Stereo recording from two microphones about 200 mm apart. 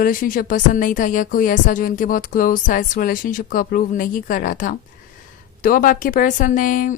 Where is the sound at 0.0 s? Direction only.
45° left (ahead or behind).